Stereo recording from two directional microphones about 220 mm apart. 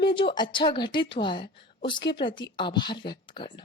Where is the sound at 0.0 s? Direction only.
20° left (ahead or behind).